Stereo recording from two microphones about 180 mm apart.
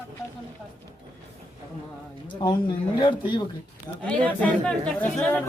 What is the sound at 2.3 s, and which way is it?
Speech, 25° left (ahead or behind).